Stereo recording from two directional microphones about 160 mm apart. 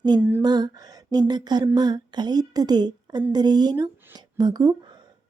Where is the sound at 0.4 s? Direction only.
25° right (ahead or behind).